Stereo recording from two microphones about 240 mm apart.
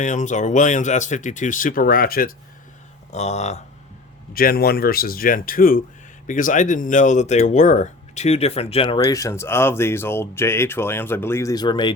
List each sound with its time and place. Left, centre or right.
0.0 s speech: left
4.4 s speech: left; by 11.9 s centre